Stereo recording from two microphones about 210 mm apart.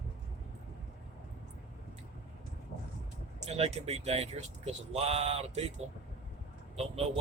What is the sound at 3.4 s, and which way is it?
Speech, 30° right (ahead or behind).